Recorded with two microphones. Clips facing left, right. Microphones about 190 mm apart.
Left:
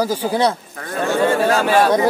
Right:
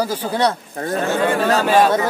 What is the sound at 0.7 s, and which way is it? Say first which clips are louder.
Speech: right 7 dB; 30° right (ahead or behind).